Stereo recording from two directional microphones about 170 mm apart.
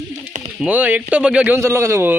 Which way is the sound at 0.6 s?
10° right (ahead or behind).